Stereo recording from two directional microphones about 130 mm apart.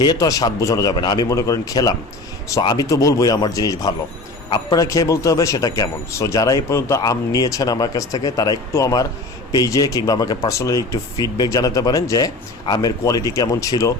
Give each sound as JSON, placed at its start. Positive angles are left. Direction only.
{"t": 0.0, "sound": "a man's voice", "side_deg": 30}